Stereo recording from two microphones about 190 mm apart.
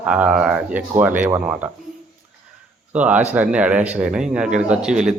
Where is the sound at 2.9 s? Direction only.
5° right (ahead or behind).